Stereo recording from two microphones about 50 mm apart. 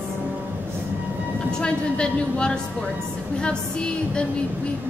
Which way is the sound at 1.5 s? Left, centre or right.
Centre.